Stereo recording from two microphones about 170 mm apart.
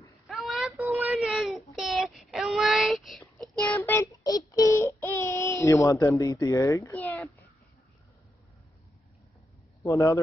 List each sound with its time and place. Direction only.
0.3 s child singing: centre (ahead or behind)
9.8 s speech: 20° left (ahead or behind)